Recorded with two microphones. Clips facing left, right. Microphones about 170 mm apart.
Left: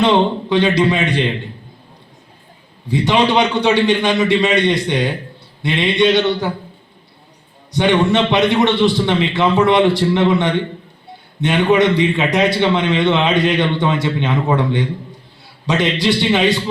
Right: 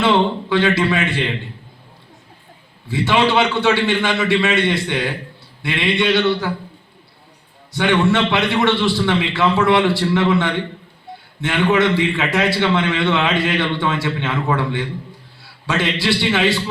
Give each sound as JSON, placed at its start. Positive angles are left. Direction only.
{"t": 0.0, "sound": "a man's voice", "side_deg": 20}
{"t": 2.8, "sound": "a man's voice", "side_deg": 15}
{"t": 7.7, "sound": "a man's voice", "side_deg": 20}